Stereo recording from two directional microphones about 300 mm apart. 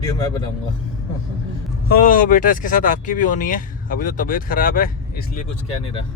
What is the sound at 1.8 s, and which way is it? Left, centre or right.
Speech, left.